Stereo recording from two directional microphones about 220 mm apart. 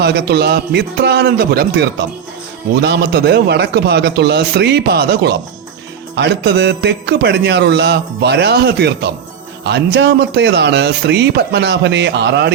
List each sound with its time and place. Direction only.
0.0 s speech: 45° right (ahead or behind)